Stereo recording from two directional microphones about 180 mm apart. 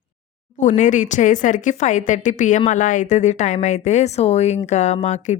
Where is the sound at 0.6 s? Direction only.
40° left (ahead or behind).